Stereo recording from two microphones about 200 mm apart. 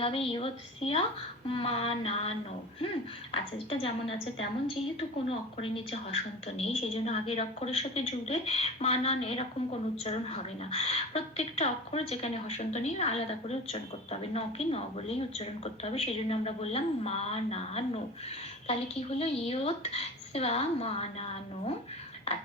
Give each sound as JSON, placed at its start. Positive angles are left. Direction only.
{"t": 0.0, "sound": "a woman's voice", "side_deg": 25}
{"t": 3.3, "sound": "a woman's voice", "side_deg": 30}
{"t": 4.9, "sound": "a woman's voice", "side_deg": 30}
{"t": 22.3, "sound": "a woman's voice", "side_deg": 30}